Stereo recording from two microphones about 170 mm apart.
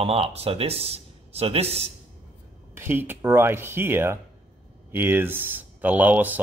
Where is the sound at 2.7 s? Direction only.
10° right (ahead or behind).